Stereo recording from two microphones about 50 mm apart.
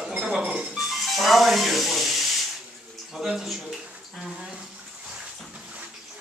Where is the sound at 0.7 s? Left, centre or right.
Centre.